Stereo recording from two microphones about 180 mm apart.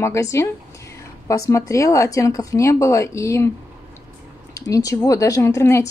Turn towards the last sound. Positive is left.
turn(degrees=15)  # may be behind; listen again after turning